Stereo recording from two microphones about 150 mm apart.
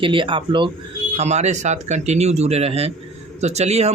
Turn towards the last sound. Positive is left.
turn(degrees=-45)  # may be behind; listen again after turning